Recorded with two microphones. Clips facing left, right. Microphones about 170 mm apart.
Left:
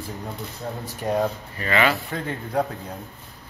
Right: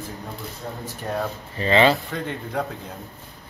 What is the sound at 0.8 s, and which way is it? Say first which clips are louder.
Speech: left 5 dB; 15° left (ahead or behind).